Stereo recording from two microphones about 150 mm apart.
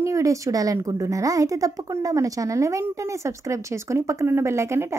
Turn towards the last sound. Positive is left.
turn(degrees=-20)  # may be behind; listen again after turning